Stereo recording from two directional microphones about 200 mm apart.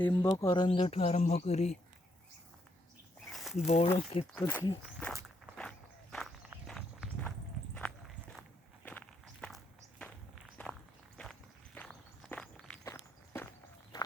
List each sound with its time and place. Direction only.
0.1 s speech: 15° left (ahead or behind); by 1.8 s 35° left (ahead or behind)
3.3 s a sound: centre (ahead or behind)
3.9 s speech: 30° left (ahead or behind)
4.4 s speech: 10° left (ahead or behind)
4.8 s walk: centre (ahead or behind); by 14.1 s 20° left (ahead or behind)